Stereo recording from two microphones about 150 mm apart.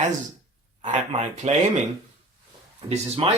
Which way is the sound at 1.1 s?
50° right (ahead or behind).